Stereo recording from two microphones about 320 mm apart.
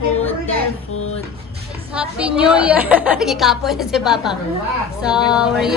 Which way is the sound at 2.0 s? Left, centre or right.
Centre.